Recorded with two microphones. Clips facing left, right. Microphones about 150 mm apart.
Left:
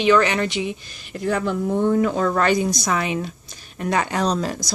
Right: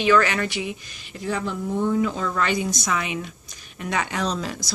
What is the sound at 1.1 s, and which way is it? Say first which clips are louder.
Speech: left 5 dB; 55° left (ahead or behind).